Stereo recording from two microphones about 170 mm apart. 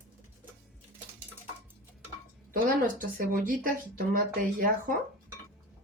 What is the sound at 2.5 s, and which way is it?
Speech, 55° right (ahead or behind).